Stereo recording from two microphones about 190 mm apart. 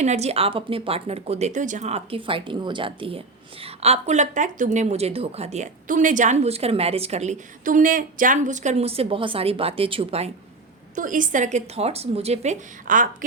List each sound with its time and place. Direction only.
0.0 s a woman's voice: 35° right (ahead or behind)
10.9 s a woman's voice: 45° right (ahead or behind)